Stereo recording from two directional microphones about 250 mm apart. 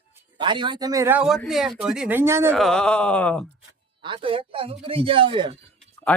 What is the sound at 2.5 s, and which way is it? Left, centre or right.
Speech, centre.